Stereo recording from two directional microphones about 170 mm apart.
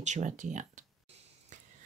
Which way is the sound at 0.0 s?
45° right (ahead or behind).